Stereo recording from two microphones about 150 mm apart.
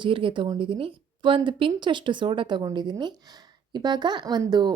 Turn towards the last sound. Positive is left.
turn(degrees=-25)  # may be behind; listen again after turning